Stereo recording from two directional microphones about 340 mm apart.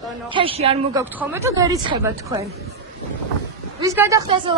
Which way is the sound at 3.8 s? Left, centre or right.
Centre.